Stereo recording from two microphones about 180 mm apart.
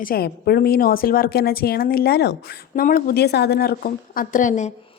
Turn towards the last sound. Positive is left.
turn(degrees=45)  # may be behind; listen again after turning